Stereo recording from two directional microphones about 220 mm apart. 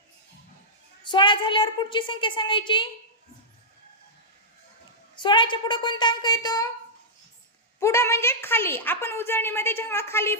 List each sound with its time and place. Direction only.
1.1 s a woman's voice: 20° left (ahead or behind)
5.1 s a woman's voice: 20° left (ahead or behind)
7.8 s a woman's voice: 15° left (ahead or behind)